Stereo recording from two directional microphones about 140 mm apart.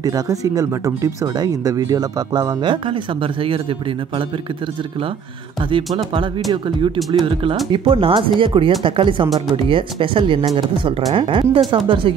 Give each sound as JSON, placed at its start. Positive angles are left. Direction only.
{"t": 0.0, "sound": "speech", "side_deg": -25}
{"t": 7.1, "sound": "speech", "side_deg": -35}